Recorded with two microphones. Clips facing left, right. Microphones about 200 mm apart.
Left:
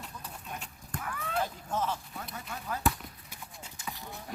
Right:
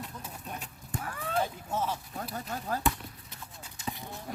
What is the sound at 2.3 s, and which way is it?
Speech, 40° right (ahead or behind).